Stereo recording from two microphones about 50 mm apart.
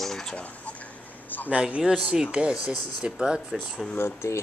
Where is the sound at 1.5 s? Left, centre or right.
Centre.